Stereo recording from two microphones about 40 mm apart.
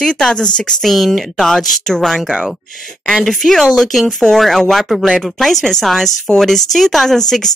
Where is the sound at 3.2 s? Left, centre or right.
Centre.